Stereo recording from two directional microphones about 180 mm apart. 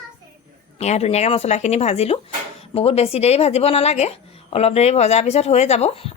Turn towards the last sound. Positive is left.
turn(degrees=35)  # may be behind; listen again after turning